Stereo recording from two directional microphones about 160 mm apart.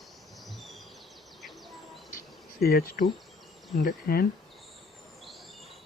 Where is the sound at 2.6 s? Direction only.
75° left (ahead or behind).